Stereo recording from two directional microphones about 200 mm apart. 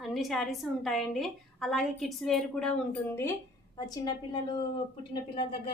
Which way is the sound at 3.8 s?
20° left (ahead or behind).